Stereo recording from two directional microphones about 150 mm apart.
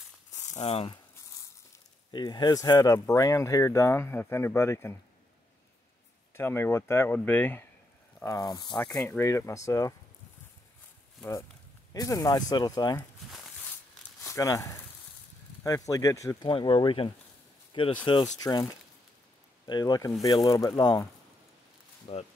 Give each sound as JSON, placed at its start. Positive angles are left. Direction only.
{"t": 0.5, "sound": "speech", "side_deg": 45}
{"t": 2.0, "sound": "speech", "side_deg": 30}
{"t": 6.3, "sound": "speech", "side_deg": 15}
{"t": 8.2, "sound": "speech", "side_deg": 25}
{"t": 8.7, "sound": "speech", "side_deg": 15}
{"t": 11.9, "sound": "speech", "side_deg": 25}
{"t": 14.2, "sound": "speech", "side_deg": 20}
{"t": 16.4, "sound": "speech", "side_deg": 35}
{"t": 22.1, "sound": "speech", "side_deg": 40}